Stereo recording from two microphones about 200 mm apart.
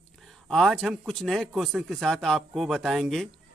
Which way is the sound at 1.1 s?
Centre (ahead or behind).